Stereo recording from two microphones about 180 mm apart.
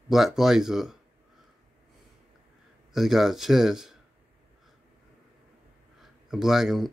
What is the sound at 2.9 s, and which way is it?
Speech, centre (ahead or behind).